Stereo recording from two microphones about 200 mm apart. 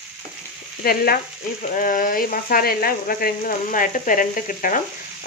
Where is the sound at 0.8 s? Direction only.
50° left (ahead or behind).